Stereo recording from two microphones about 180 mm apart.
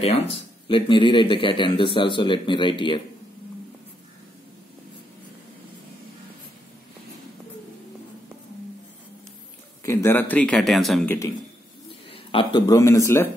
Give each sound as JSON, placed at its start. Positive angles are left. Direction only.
{"t": 0.7, "sound": "a man's voice", "side_deg": 25}
{"t": 9.8, "sound": "speech", "side_deg": 15}
{"t": 12.1, "sound": "speech", "side_deg": 30}